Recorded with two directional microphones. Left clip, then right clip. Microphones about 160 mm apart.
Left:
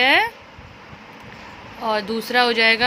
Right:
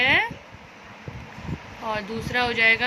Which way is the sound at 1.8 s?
60° left (ahead or behind).